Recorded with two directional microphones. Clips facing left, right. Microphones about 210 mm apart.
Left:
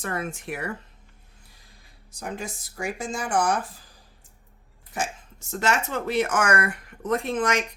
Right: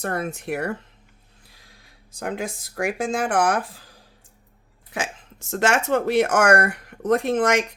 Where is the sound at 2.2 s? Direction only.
60° right (ahead or behind).